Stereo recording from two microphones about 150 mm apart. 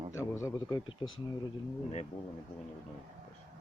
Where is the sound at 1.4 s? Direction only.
40° left (ahead or behind).